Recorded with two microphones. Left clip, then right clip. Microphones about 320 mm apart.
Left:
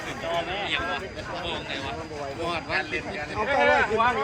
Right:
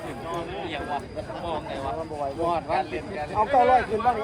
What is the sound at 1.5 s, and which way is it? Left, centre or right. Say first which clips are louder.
A man's voice: right 3 dB; right.